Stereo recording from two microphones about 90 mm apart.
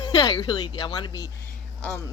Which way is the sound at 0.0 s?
50° left (ahead or behind).